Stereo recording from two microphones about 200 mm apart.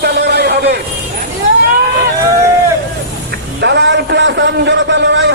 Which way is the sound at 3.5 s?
60° right (ahead or behind).